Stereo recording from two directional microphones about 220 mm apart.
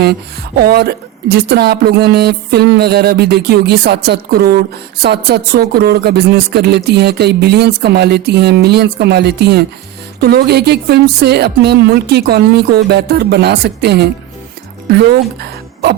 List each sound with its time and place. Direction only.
0.0 s speech: 45° right (ahead or behind)